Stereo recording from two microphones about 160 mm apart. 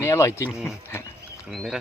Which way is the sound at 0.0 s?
20° left (ahead or behind).